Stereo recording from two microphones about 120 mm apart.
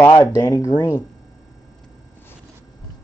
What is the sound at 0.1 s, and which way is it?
Speech, 30° left (ahead or behind).